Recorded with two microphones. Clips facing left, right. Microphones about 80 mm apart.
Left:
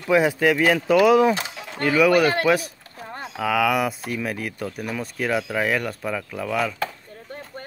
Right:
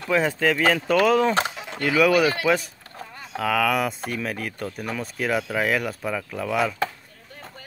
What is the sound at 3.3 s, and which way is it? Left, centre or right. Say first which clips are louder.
Speech: left 1 dB; centre.